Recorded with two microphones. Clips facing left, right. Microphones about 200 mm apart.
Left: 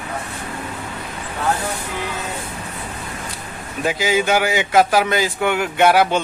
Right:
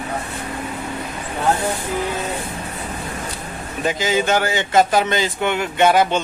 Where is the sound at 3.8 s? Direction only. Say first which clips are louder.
Left 1 dB; 10° left (ahead or behind).